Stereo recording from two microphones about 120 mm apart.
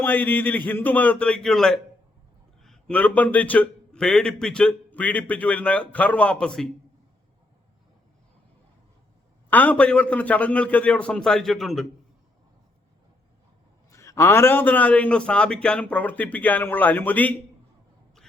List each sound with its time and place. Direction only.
0.0 s a man's voice: 15° left (ahead or behind)
9.5 s a man's voice: 15° left (ahead or behind)
13.9 s a man's voice: 25° left (ahead or behind)